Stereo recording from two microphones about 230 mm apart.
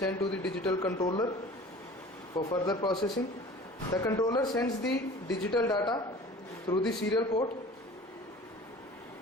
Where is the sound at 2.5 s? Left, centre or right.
Centre.